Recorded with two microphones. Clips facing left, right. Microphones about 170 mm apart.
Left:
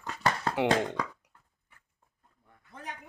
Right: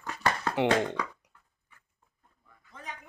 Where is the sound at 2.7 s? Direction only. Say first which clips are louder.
Left 1 dB; 65° left (ahead or behind).